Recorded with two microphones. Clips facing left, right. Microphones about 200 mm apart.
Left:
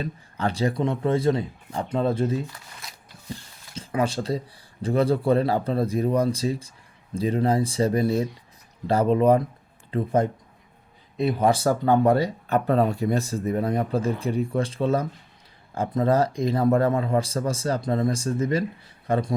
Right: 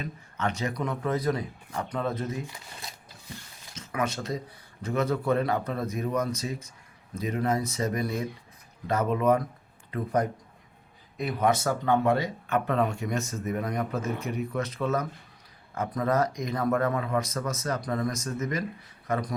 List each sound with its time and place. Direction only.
0.0 s speech: 35° left (ahead or behind)
3.8 s speech: 30° left (ahead or behind)